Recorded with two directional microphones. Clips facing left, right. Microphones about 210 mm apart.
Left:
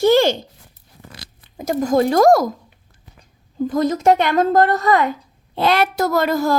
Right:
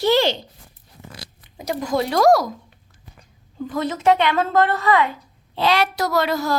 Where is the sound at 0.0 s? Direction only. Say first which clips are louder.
Left 4 dB; 50° left (ahead or behind).